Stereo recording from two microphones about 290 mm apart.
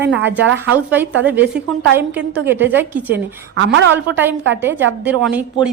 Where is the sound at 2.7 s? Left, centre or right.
Centre.